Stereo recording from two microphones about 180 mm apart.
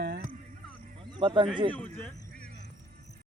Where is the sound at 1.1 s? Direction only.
25° right (ahead or behind).